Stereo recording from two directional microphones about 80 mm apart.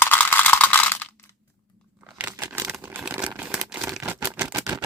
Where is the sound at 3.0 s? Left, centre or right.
Centre.